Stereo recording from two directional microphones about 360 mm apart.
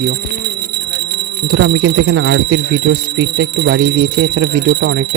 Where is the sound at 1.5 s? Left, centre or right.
Right.